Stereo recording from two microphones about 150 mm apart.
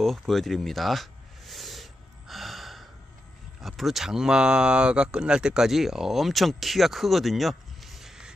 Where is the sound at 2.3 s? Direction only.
Centre (ahead or behind).